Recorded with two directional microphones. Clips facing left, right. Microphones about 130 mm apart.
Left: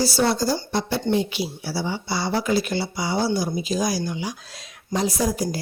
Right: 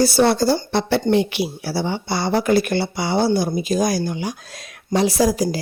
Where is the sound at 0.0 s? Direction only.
60° right (ahead or behind).